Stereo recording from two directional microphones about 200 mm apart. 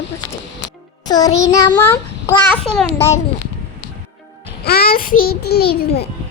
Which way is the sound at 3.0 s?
15° left (ahead or behind).